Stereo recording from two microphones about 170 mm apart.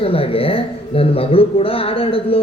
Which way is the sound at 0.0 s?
35° left (ahead or behind).